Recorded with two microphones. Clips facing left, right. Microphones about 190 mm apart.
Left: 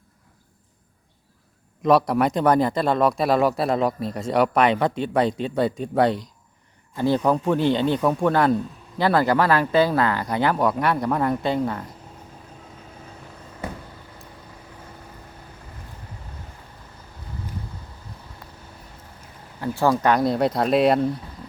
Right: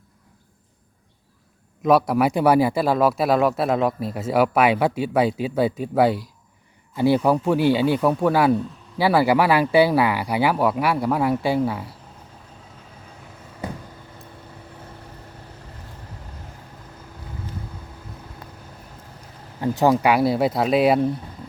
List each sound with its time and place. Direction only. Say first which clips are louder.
1.8 s speech: right 1 dB; 5° right (ahead or behind)
19.6 s speech: right 2 dB; 20° right (ahead or behind)